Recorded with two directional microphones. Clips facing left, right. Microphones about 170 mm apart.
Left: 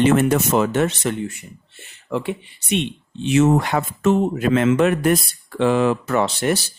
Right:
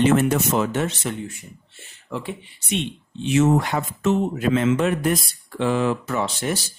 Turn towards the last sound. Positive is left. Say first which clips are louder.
# left 5 dB
turn(degrees=70)  # may be behind; listen again after turning